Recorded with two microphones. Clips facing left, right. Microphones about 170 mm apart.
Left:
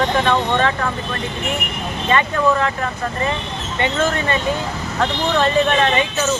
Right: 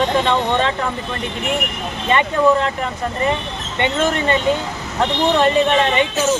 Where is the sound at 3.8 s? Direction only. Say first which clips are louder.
Right 1 dB; 20° right (ahead or behind).